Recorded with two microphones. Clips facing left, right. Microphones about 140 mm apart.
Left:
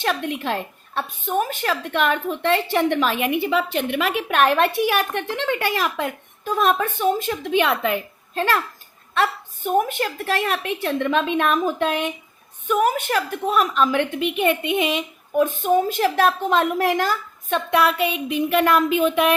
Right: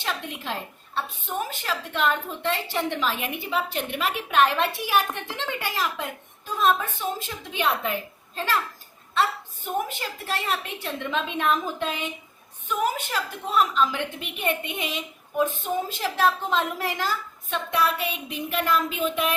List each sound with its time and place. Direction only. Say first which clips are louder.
0.0 s a woman's voice: left 8 dB; 60° left (ahead or behind)
9.6 s a woman's voice: left 8 dB; 60° left (ahead or behind)